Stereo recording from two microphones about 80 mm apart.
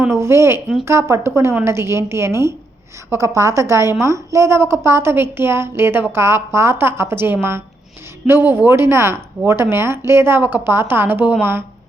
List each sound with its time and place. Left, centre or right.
0.1 s a woman's voice: right